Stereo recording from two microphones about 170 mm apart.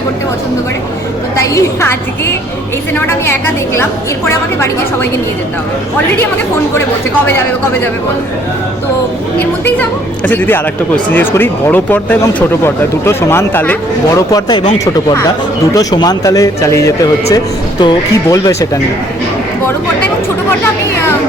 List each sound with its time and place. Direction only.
1.5 s speech: 15° left (ahead or behind)
9.4 s speech: 10° left (ahead or behind)
15.7 s a man's voice: 20° left (ahead or behind)